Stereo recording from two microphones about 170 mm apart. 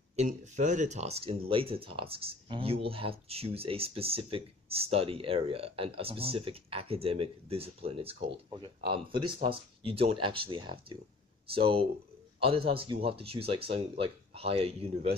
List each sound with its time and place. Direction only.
0.1 s speech: 40° right (ahead or behind)